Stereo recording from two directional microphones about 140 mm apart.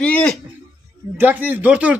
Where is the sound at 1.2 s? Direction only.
15° right (ahead or behind).